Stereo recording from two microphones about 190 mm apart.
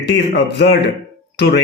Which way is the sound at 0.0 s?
65° left (ahead or behind).